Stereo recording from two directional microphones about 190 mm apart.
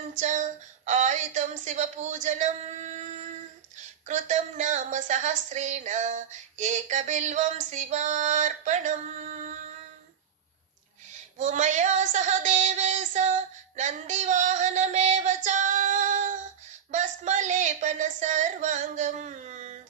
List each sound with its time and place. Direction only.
0.2 s female singing: 40° right (ahead or behind)
11.3 s child singing: 40° right (ahead or behind)
16.9 s female singing: 40° right (ahead or behind)